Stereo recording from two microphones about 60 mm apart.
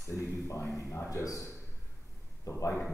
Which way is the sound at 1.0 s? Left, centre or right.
Left.